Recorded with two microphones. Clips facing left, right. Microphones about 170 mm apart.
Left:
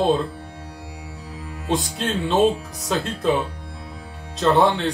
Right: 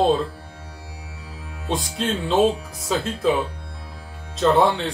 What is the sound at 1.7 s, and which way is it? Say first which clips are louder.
Speech: left 1 dB; centre (ahead or behind).